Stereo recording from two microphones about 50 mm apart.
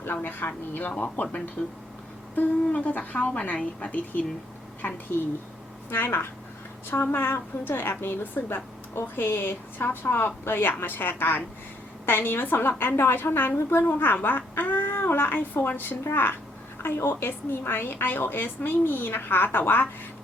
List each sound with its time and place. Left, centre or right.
0.2 s a child's voice: left
0.9 s a woman's voice: left
5.9 s a woman's voice: left